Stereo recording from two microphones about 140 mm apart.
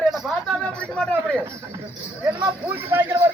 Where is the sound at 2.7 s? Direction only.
15° right (ahead or behind).